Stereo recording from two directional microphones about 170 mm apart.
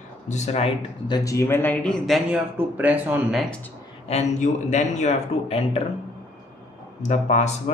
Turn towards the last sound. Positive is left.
turn(degrees=45)  # may be behind; listen again after turning